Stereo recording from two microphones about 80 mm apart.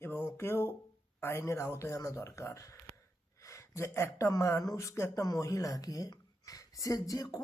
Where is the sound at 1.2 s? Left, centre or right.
Left.